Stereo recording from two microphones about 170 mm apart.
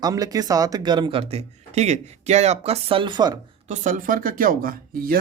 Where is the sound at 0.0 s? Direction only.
20° right (ahead or behind).